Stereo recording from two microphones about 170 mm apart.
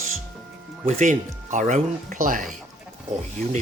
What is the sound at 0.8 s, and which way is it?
Speech, 45° right (ahead or behind).